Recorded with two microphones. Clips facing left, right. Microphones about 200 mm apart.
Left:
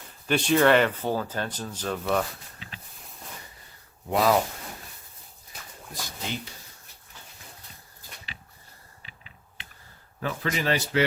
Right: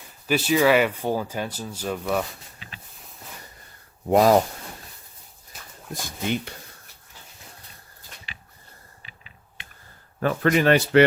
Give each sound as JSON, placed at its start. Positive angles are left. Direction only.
{"t": 0.3, "sound": "speech", "side_deg": -5}
{"t": 4.1, "sound": "speech", "side_deg": -45}
{"t": 5.9, "sound": "speech", "side_deg": -60}
{"t": 10.2, "sound": "speech", "side_deg": -55}